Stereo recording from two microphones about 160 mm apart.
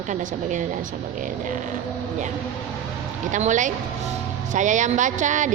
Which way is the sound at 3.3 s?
50° right (ahead or behind).